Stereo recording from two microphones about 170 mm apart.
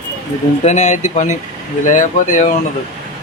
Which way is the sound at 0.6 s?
40° left (ahead or behind).